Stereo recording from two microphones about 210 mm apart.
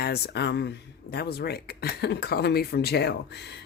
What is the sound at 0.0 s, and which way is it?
Speech, 50° left (ahead or behind).